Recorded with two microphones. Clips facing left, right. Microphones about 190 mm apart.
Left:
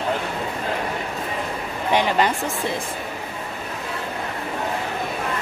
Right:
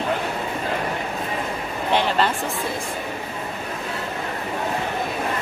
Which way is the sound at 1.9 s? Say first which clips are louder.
Left 1 dB; 15° left (ahead or behind).